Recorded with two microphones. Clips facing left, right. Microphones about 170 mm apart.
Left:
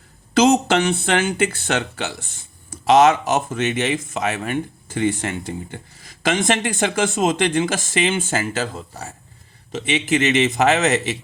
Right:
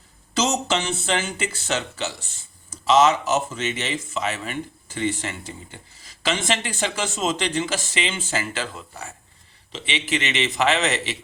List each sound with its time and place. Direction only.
0.3 s speech: 60° left (ahead or behind)